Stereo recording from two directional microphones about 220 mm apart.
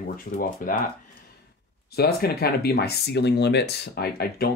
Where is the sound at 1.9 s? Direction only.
45° left (ahead or behind).